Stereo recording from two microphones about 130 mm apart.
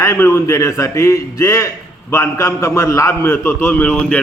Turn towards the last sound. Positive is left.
turn(degrees=10)  # may be behind; listen again after turning